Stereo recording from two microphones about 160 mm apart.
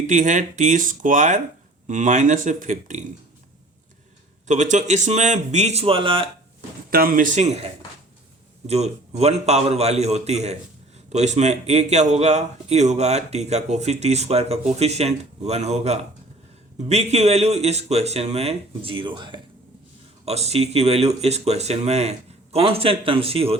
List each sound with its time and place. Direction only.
0.1 s a man's voice: 50° right (ahead or behind)
4.4 s a man's voice: 50° right (ahead or behind); by 6.2 s 35° right (ahead or behind)
6.9 s speech: 65° right (ahead or behind)
8.6 s a man's voice: 40° right (ahead or behind)
20.2 s speech: 40° right (ahead or behind)